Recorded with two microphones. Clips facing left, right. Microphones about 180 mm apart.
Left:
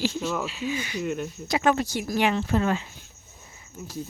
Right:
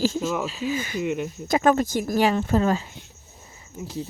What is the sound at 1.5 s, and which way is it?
Speech, 45° right (ahead or behind).